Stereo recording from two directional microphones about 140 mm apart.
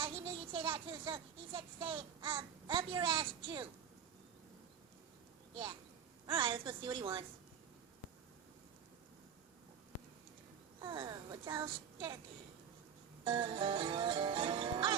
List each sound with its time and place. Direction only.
0.0 s speech: 40° right (ahead or behind)
6.2 s music: 35° right (ahead or behind)
10.8 s speech: 30° right (ahead or behind)
13.2 s music: 35° right (ahead or behind)